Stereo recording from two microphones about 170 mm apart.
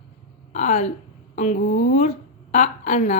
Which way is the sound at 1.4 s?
45° left (ahead or behind).